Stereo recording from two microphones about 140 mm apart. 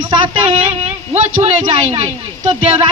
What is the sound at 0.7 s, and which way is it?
Speech, 45° right (ahead or behind).